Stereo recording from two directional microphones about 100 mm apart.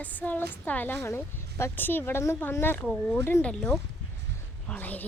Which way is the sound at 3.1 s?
20° left (ahead or behind).